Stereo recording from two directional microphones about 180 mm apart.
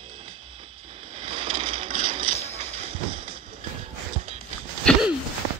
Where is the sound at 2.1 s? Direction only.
30° right (ahead or behind).